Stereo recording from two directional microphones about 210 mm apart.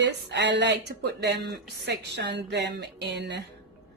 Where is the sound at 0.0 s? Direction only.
55° right (ahead or behind).